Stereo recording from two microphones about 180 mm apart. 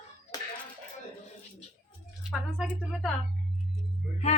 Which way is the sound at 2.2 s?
5° right (ahead or behind).